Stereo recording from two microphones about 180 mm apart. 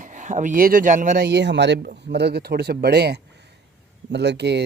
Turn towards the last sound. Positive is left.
turn(degrees=-70)  # may be behind; listen again after turning